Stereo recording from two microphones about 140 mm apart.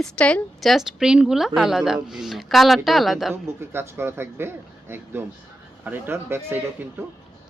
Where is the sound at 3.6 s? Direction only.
15° right (ahead or behind).